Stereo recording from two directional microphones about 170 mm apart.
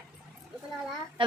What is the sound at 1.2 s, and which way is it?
Speech, 30° right (ahead or behind).